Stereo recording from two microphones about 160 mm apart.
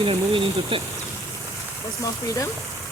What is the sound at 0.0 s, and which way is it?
Speech, 35° right (ahead or behind).